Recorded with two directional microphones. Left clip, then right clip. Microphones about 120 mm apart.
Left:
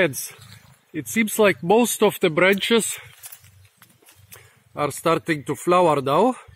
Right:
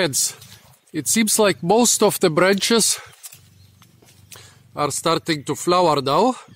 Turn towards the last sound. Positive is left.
turn(degrees=-20)  # may be behind; listen again after turning